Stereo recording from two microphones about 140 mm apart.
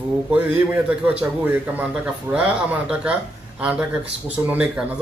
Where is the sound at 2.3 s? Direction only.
15° right (ahead or behind).